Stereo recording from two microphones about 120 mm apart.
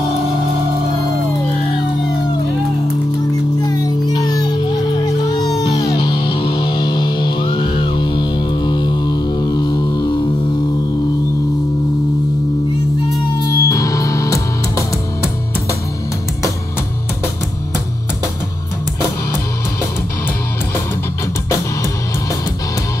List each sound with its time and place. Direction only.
3.6 s music: 35° left (ahead or behind)
13.1 s music: 30° left (ahead or behind)